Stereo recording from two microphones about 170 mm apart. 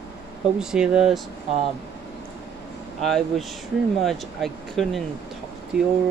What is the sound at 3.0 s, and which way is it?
Speech, centre (ahead or behind).